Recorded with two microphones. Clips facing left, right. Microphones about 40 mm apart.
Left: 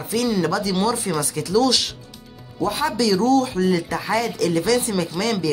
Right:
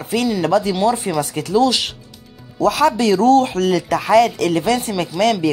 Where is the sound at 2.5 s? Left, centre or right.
Right.